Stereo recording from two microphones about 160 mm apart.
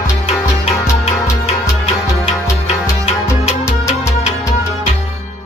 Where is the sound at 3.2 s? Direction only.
15° left (ahead or behind).